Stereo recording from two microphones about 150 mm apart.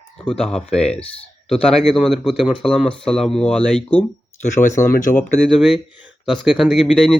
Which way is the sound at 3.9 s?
50° left (ahead or behind).